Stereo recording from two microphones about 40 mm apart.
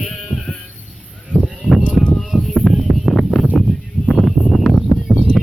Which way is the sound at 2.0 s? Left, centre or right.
Right.